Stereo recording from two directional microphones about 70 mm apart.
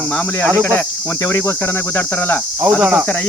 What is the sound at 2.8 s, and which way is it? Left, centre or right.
Cricket, centre.